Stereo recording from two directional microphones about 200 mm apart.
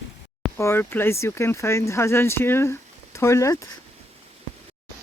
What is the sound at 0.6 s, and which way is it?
Speech, 10° left (ahead or behind).